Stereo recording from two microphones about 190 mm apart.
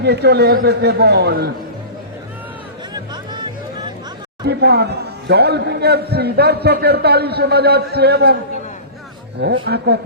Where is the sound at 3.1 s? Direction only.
20° right (ahead or behind).